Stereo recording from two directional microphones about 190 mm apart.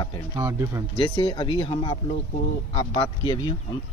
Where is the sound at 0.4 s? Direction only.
15° right (ahead or behind).